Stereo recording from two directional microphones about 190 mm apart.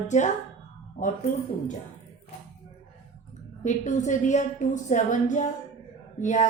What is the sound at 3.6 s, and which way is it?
A woman's voice, 40° left (ahead or behind).